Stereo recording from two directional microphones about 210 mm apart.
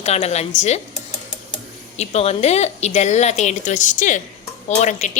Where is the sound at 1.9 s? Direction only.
30° left (ahead or behind).